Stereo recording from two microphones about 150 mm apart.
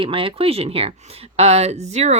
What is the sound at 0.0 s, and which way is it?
Speech, 35° right (ahead or behind).